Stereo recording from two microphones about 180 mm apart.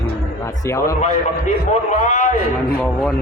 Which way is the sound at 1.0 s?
40° left (ahead or behind).